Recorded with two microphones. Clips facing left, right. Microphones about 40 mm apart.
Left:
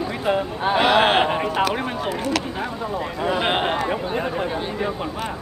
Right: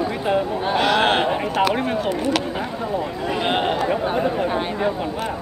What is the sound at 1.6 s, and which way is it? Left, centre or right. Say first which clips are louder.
Speech: right 2 dB; centre.